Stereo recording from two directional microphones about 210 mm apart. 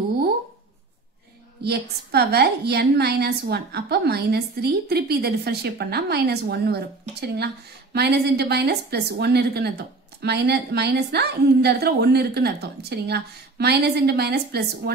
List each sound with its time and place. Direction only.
1.6 s a woman's voice: 50° right (ahead or behind)